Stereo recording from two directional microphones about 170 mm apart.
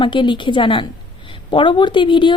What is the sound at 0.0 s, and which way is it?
A woman's voice, 30° left (ahead or behind).